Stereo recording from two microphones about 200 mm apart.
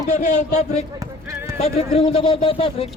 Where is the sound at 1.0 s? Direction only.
15° right (ahead or behind).